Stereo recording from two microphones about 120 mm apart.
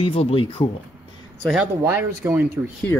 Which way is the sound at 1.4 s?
5° right (ahead or behind).